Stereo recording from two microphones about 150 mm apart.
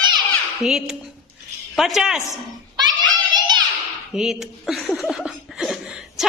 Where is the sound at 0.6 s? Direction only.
5° right (ahead or behind).